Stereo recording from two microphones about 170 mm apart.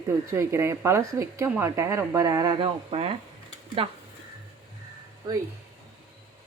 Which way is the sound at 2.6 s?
35° right (ahead or behind).